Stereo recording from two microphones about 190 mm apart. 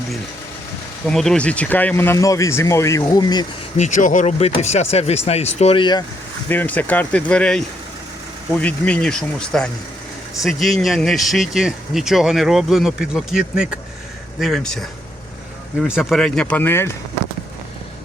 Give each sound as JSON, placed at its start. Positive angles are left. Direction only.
{"t": 1.0, "sound": "speech", "side_deg": 0}
{"t": 3.8, "sound": "speech", "side_deg": 40}
{"t": 6.5, "sound": "speech", "side_deg": 10}
{"t": 8.6, "sound": "speech", "side_deg": 5}